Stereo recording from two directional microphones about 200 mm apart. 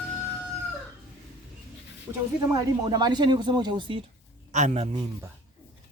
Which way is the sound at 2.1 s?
15° right (ahead or behind).